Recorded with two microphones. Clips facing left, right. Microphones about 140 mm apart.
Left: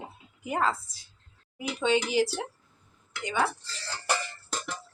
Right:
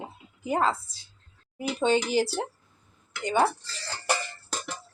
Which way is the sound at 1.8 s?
40° right (ahead or behind).